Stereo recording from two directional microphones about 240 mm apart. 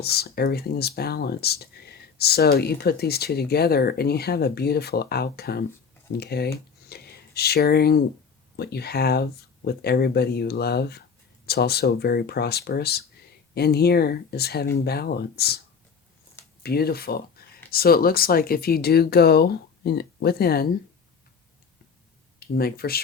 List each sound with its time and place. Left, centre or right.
0.0 s speech: left
16.6 s speech: left
22.4 s speech: left